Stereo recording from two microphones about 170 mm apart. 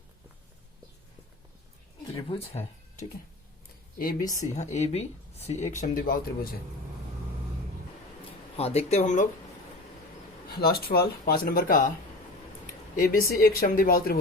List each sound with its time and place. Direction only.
2.2 s speech: 35° left (ahead or behind)
4.3 s speech: 45° left (ahead or behind)
5.7 s speech: 50° left (ahead or behind)
8.5 s speech: 35° left (ahead or behind)
10.6 s speech: 65° left (ahead or behind)
13.0 s speech: 60° left (ahead or behind)